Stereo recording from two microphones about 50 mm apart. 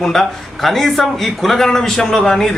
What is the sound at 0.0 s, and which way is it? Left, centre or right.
A man's voice, centre.